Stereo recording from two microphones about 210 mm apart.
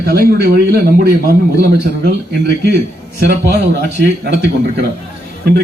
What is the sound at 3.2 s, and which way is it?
A man's voice, 50° right (ahead or behind).